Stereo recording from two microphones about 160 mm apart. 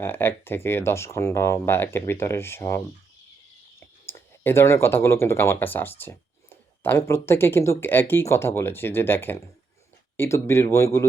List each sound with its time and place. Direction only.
0.0 s speech: 15° left (ahead or behind)
4.0 s speech: 15° left (ahead or behind)